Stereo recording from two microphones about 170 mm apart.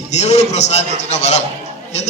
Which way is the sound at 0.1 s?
40° left (ahead or behind).